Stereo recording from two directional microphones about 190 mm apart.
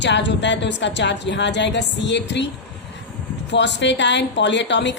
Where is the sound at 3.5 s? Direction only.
65° left (ahead or behind).